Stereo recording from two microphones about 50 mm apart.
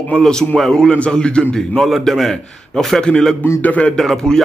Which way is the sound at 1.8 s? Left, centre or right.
Centre.